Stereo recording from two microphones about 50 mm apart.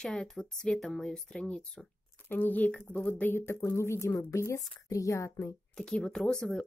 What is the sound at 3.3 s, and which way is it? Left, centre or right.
Speech, left.